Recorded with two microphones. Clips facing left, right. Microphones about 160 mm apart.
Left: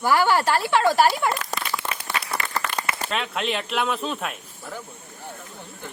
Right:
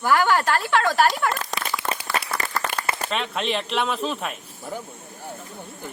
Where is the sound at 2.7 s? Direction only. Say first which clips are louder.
Even; 50° right (ahead or behind).